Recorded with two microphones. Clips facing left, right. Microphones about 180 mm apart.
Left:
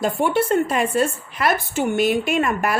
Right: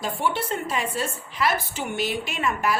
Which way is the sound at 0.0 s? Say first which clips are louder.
Left 7 dB; 50° left (ahead or behind).